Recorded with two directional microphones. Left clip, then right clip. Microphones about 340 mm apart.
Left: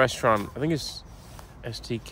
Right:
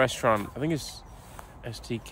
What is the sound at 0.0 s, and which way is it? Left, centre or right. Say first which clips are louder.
Speech: left 2 dB; centre.